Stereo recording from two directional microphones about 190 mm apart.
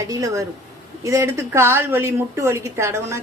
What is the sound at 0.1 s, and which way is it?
A woman's voice, 15° right (ahead or behind).